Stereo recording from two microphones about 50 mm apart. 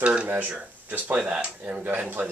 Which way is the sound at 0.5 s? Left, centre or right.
Right.